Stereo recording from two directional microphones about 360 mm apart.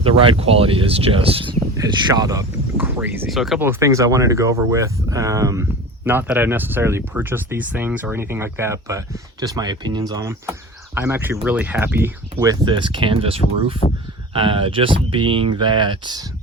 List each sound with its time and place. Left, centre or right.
0.0 s speech: centre
13.8 s speech: centre
14.3 s speech: centre